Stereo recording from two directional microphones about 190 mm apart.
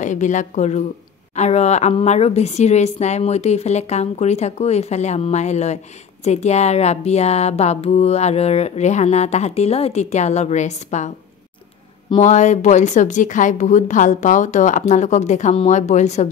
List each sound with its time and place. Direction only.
0.0 s speech: 40° left (ahead or behind)
12.2 s speech: 35° left (ahead or behind)